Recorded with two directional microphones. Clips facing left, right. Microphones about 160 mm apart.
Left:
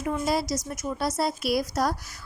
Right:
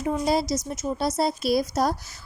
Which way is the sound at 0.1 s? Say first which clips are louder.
Right 3 dB; 20° right (ahead or behind).